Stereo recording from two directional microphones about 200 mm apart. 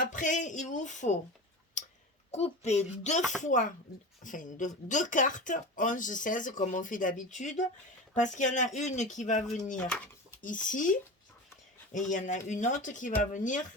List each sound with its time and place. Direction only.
0.0 s speech: 40° left (ahead or behind)
1.8 s clicking: 40° left (ahead or behind)
2.3 s speech: 35° left (ahead or behind)
9.7 s speech: 5° left (ahead or behind)
10.4 s speech: 40° left (ahead or behind)